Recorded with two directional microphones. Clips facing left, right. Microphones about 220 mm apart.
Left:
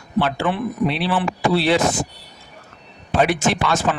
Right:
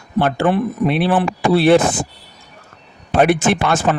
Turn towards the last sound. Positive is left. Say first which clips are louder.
# right 3 dB
turn(degrees=-55)  # may be behind; listen again after turning